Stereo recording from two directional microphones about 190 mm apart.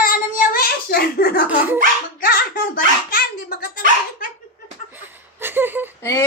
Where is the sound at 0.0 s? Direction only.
50° left (ahead or behind).